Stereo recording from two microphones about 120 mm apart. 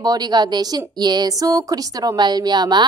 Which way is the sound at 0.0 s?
35° right (ahead or behind).